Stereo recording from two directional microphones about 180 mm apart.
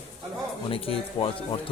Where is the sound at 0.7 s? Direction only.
30° left (ahead or behind).